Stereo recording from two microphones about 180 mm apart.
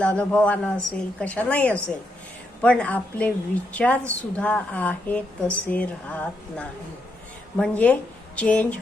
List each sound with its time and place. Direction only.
0.0 s a woman's voice: 5° left (ahead or behind)